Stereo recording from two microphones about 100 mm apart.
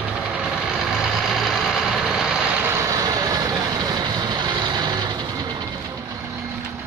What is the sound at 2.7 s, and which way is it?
Vehicle, 35° right (ahead or behind).